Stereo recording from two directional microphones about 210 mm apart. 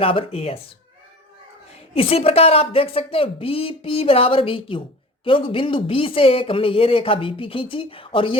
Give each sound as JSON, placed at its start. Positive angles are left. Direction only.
{"t": 0.0, "sound": "speech", "side_deg": 25}
{"t": 2.0, "sound": "speech", "side_deg": 25}